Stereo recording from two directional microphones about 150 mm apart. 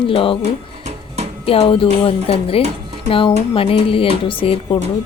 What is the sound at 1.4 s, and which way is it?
Speech, 40° left (ahead or behind).